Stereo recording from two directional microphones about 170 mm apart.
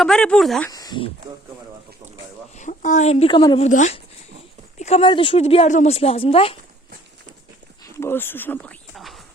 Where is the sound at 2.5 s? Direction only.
45° left (ahead or behind).